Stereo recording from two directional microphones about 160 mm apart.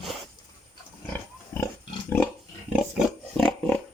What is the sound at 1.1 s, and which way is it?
Pig, 15° left (ahead or behind).